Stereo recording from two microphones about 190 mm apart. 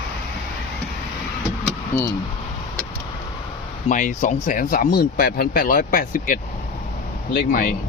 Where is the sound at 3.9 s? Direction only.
40° left (ahead or behind).